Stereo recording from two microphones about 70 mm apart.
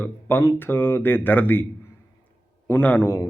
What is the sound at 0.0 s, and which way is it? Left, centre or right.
A man's voice, left.